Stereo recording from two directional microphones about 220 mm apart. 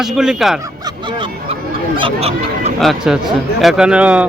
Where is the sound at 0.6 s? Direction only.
20° right (ahead or behind).